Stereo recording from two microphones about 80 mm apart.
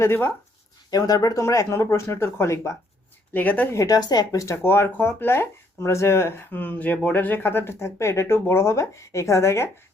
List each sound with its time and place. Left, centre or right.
0.0 s speech: left
0.9 s speech: left
1.4 s speech: left
3.3 s speech: left
3.7 s speech: left